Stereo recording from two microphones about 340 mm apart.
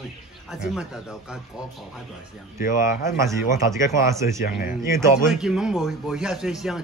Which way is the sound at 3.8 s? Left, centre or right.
Centre.